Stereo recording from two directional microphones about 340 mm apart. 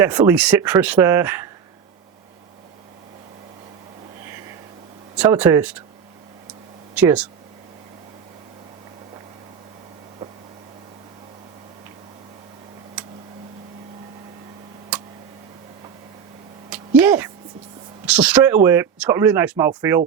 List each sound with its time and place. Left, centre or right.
0.0 s speech: centre
5.1 s speech: centre
6.9 s speech: centre
16.6 s a sound: centre
18.0 s speech: centre